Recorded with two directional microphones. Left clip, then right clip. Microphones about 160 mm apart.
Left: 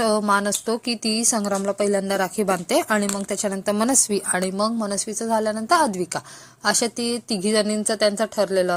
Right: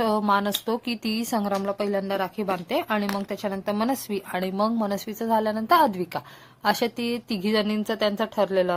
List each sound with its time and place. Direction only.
0.0 s a woman's voice: 20° left (ahead or behind)